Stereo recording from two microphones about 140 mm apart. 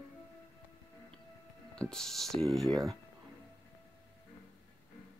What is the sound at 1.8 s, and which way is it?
Speech, 5° left (ahead or behind).